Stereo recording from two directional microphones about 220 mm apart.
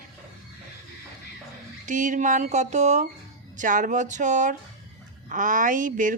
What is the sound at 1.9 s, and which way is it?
A woman's voice, 35° right (ahead or behind).